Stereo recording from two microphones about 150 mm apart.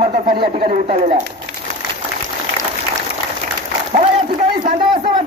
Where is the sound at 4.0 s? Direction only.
35° right (ahead or behind).